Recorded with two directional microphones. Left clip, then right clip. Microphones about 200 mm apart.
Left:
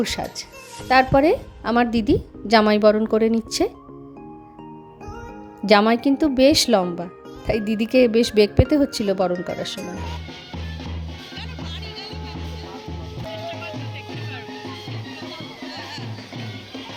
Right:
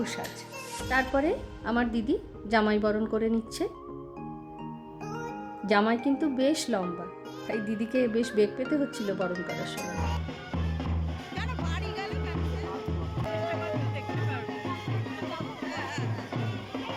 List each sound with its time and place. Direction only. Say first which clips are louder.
0.0 s a woman's voice: left 9 dB; 40° left (ahead or behind)
5.6 s a woman's voice: left 9 dB; 40° left (ahead or behind)
9.3 s speech: left 8 dB; centre (ahead or behind)